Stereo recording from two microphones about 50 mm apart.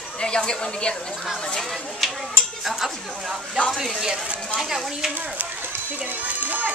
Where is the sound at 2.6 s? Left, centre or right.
Centre.